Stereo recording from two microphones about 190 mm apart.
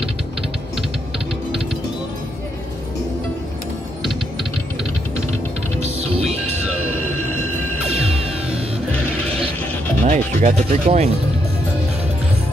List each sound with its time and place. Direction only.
10.0 s speech: 35° right (ahead or behind)